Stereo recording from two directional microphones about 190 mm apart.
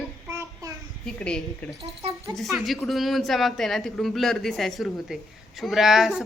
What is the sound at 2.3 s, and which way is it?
A woman's voice, centre (ahead or behind).